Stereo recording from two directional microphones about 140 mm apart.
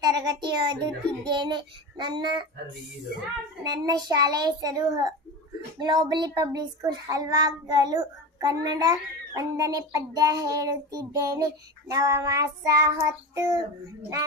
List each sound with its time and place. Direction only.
0.0 s a sound: 30° right (ahead or behind)
1.2 s child singing: 35° right (ahead or behind)
3.6 s speech: 30° right (ahead or behind)